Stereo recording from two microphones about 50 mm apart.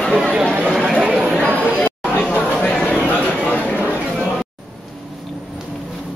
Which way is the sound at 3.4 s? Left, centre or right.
Left.